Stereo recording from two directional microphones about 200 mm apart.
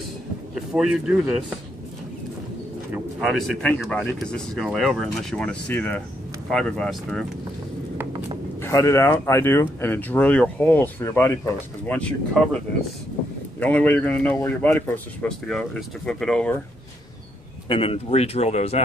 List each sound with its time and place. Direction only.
0.6 s speech: 5° right (ahead or behind)
2.9 s speech: centre (ahead or behind)
8.5 s speech: 15° left (ahead or behind)
17.6 s speech: 30° left (ahead or behind)